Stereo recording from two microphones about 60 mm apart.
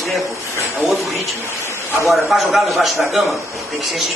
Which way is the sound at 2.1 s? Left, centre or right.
Centre.